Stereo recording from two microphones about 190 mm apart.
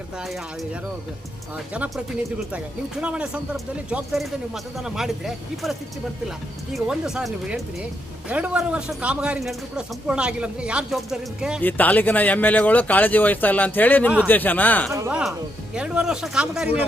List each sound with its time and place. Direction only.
0.2 s speech: centre (ahead or behind)
3.0 s speech: 5° right (ahead or behind)
6.7 s speech: 5° right (ahead or behind)
11.6 s speech: 10° left (ahead or behind)
14.9 s speech: 15° right (ahead or behind)